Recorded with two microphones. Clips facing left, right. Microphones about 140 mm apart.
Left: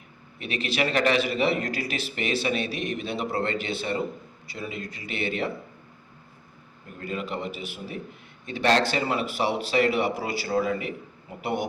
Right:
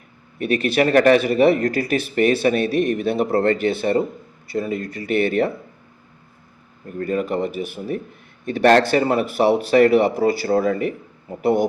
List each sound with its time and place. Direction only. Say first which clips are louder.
0.3 s a man's voice: right 9 dB; 50° right (ahead or behind)
7.0 s a man's voice: right 10 dB; 45° right (ahead or behind)